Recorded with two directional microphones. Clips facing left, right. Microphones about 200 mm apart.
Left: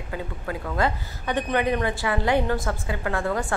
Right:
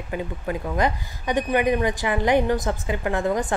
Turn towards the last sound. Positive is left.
turn(degrees=-20)  # may be behind; listen again after turning